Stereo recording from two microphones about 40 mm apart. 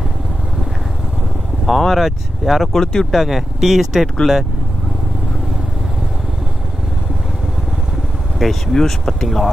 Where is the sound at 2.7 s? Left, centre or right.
Centre.